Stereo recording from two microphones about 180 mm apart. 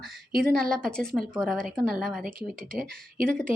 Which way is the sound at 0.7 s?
5° left (ahead or behind).